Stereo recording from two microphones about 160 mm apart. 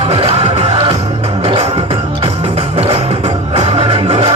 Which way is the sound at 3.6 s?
35° right (ahead or behind).